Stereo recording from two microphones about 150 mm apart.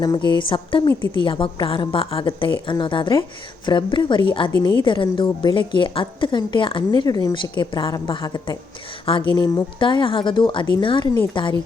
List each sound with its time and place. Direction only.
0.0 s a woman's voice: 30° left (ahead or behind)